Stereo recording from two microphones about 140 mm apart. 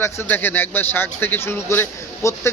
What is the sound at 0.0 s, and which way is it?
A man's voice, 15° left (ahead or behind).